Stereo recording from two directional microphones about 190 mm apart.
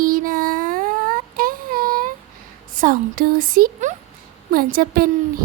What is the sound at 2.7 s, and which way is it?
Female singing, 50° right (ahead or behind).